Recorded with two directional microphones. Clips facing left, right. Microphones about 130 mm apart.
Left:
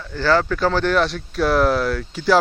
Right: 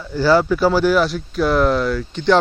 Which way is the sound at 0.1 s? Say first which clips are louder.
Right 4 dB; 10° right (ahead or behind).